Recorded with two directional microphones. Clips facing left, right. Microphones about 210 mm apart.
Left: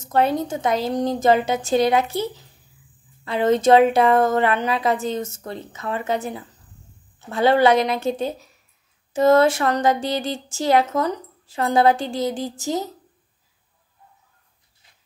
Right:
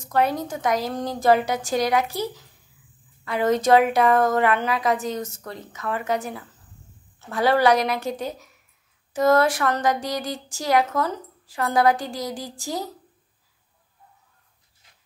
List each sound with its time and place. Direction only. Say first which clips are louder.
0.0 s speech: left 3 dB; 25° left (ahead or behind)